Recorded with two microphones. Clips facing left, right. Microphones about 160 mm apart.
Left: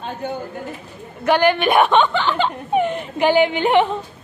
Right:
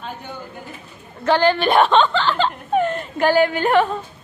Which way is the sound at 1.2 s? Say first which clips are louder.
Left 1 dB; 15° left (ahead or behind).